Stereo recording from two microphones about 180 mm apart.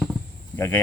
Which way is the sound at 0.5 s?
10° left (ahead or behind).